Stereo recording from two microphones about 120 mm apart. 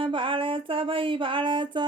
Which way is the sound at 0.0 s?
45° right (ahead or behind).